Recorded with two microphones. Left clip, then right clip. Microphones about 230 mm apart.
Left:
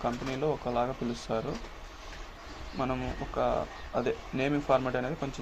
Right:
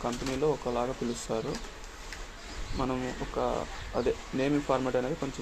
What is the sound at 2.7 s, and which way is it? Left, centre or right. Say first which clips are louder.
Speech: even; centre.